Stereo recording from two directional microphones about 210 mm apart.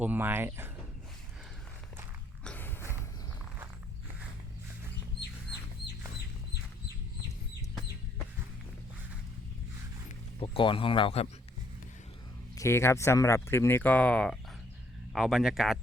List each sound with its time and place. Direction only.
0.0 s speech: 10° right (ahead or behind)
2.4 s a sound: 5° left (ahead or behind)
10.1 s speech: 25° left (ahead or behind)
12.5 s speech: 10° left (ahead or behind)